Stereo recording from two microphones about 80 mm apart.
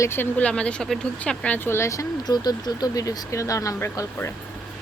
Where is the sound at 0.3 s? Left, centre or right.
Centre.